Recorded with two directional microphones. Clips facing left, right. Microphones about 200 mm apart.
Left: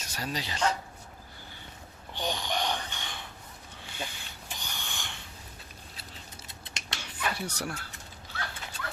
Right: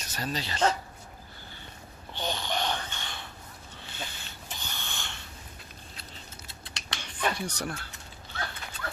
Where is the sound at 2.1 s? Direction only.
15° left (ahead or behind).